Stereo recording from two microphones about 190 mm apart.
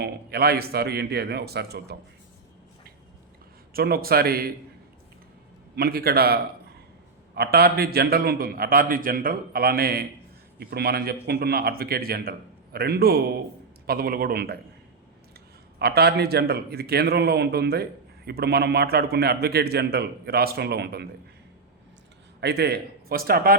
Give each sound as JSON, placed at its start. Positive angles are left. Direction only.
{"t": 0.0, "sound": "a man's voice", "side_deg": -55}
{"t": 3.7, "sound": "a man's voice", "side_deg": -50}
{"t": 5.7, "sound": "a man's voice", "side_deg": -55}
{"t": 15.8, "sound": "a man's voice", "side_deg": -55}
{"t": 22.4, "sound": "a man's voice", "side_deg": -60}